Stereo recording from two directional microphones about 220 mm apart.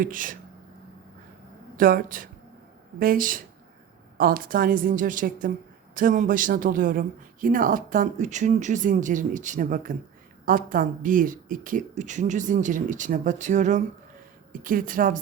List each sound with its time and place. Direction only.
0.0 s speech: 40° right (ahead or behind)
1.7 s speech: 40° right (ahead or behind)